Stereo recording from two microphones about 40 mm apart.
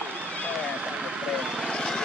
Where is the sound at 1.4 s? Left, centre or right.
Centre.